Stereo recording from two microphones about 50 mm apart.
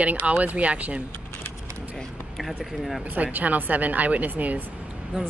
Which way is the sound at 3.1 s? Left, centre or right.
Right.